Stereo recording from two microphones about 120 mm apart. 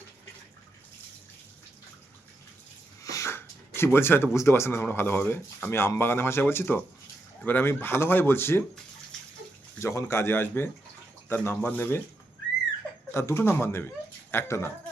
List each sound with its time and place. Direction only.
3.0 s a sound: 30° left (ahead or behind)
3.9 s speech: 20° left (ahead or behind)
9.8 s speech: 25° left (ahead or behind)
13.1 s speech: 25° left (ahead or behind)